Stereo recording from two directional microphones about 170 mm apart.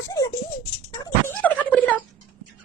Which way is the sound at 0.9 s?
10° left (ahead or behind).